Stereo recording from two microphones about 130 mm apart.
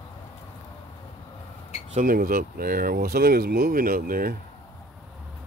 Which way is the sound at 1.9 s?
90° right.